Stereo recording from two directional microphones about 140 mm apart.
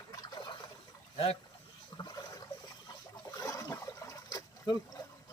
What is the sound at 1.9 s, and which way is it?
Water, 30° left (ahead or behind).